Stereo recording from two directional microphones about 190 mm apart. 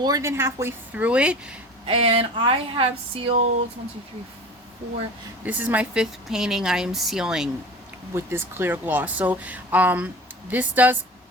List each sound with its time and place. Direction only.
0.0 s speech: 15° right (ahead or behind)
1.9 s speech: 30° right (ahead or behind)
5.5 s speech: 10° right (ahead or behind)